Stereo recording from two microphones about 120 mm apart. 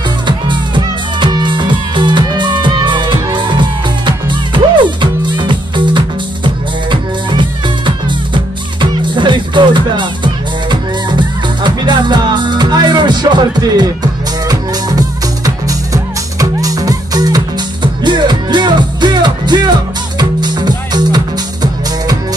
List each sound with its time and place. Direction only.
0.5 s music: 40° right (ahead or behind)
9.1 s music: 40° right (ahead or behind)